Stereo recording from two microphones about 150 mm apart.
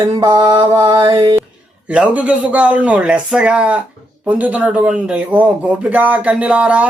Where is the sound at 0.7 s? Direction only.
20° right (ahead or behind).